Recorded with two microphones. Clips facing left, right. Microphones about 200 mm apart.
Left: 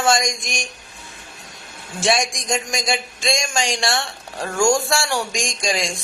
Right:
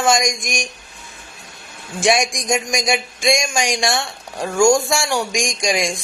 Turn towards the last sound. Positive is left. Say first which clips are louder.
# right 3 dB
turn(degrees=-15)  # may be behind; listen again after turning